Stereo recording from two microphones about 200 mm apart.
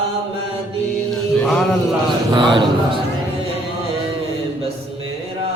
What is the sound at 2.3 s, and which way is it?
Speech, 25° right (ahead or behind).